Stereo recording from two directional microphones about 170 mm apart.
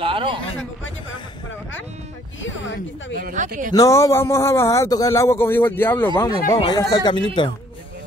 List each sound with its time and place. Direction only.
0.0 s a sound: 30° right (ahead or behind)
3.2 s speech: 55° right (ahead or behind)
3.7 s a man's voice: 20° left (ahead or behind)